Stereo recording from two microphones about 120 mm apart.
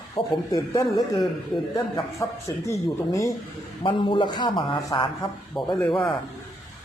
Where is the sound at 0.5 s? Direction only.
30° left (ahead or behind).